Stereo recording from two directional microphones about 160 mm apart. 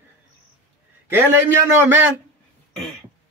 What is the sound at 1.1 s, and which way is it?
A man's voice, 15° right (ahead or behind).